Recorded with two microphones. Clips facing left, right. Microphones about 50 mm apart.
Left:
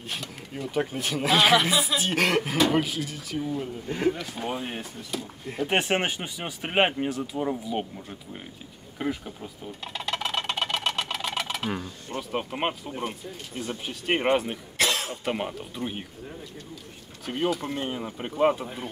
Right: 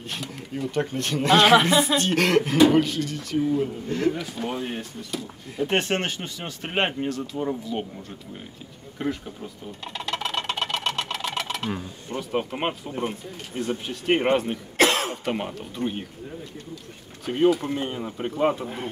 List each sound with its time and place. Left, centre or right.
0.1 s speech: centre
3.3 s speech: centre
8.9 s a sound: centre
11.8 s speech: centre
14.8 s cough: right
15.2 s speech: centre